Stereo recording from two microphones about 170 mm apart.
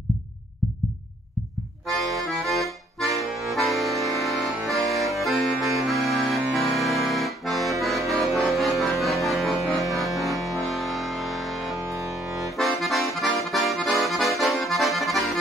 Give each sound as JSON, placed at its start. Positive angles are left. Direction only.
{"t": 1.9, "sound": "accordion", "side_deg": 0}
{"t": 8.2, "sound": "music", "side_deg": 0}
{"t": 11.7, "sound": "music", "side_deg": -15}
{"t": 12.1, "sound": "accordion", "side_deg": 0}